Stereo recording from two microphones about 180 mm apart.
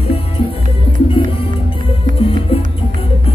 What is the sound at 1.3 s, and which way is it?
Music, 30° left (ahead or behind).